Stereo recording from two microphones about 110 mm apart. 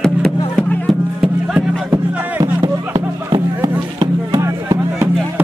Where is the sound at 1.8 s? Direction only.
30° right (ahead or behind).